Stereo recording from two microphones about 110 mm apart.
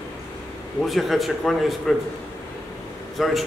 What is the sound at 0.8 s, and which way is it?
A man's voice, centre (ahead or behind).